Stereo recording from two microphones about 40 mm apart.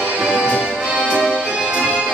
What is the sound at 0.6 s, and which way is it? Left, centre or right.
Music, right.